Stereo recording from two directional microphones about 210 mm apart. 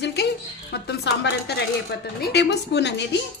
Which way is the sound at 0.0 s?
50° left (ahead or behind).